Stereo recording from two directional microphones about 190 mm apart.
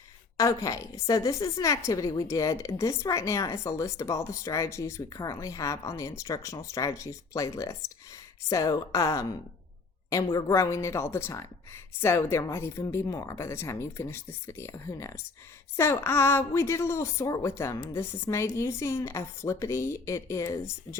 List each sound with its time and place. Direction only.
0.3 s a woman's voice: 20° left (ahead or behind)